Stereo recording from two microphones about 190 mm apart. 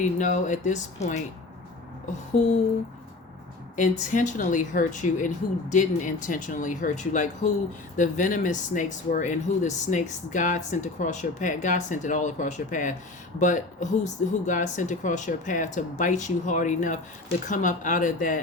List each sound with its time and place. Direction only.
0.2 s speech: 40° left (ahead or behind)
3.8 s speech: 40° left (ahead or behind)